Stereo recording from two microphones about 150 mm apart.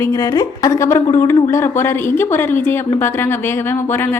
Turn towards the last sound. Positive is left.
turn(degrees=15)  # may be behind; listen again after turning